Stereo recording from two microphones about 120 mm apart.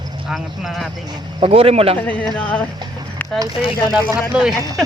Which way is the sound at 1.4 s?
55° right (ahead or behind).